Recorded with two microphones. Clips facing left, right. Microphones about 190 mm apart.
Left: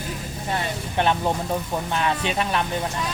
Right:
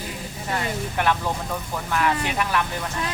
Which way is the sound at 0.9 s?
25° left (ahead or behind).